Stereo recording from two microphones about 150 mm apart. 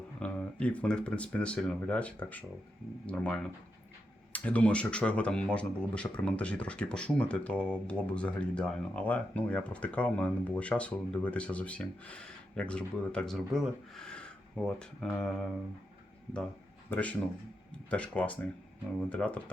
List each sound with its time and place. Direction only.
0.2 s speech: 10° left (ahead or behind)
16.9 s speech: 10° left (ahead or behind)